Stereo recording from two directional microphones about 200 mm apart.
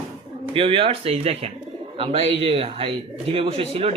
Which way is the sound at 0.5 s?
25° right (ahead or behind).